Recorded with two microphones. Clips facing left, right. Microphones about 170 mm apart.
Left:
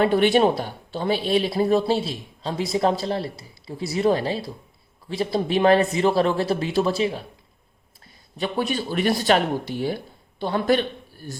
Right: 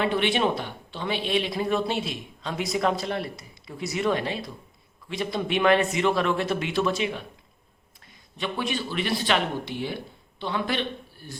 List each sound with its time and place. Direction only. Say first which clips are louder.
0.0 s speech: left 6 dB; 40° left (ahead or behind)
8.4 s a man's voice: left 4 dB; 40° left (ahead or behind)